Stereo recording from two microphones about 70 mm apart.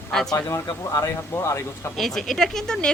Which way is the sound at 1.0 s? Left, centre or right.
Left.